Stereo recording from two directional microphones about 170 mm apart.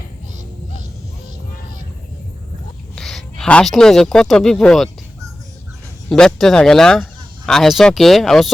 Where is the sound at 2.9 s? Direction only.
Centre (ahead or behind).